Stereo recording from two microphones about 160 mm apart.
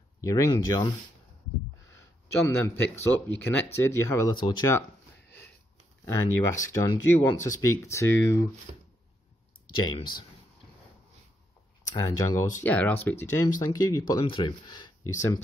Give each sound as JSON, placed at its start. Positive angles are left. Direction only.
{"t": 0.2, "sound": "speech", "side_deg": 20}
{"t": 6.0, "sound": "speech", "side_deg": 20}
{"t": 8.7, "sound": "a sound", "side_deg": -40}
{"t": 9.8, "sound": "speech", "side_deg": 30}
{"t": 11.9, "sound": "speech", "side_deg": 20}
{"t": 12.5, "sound": "speech", "side_deg": 10}